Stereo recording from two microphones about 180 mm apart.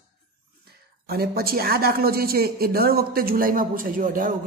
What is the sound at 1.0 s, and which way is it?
A woman's voice, 60° right (ahead or behind).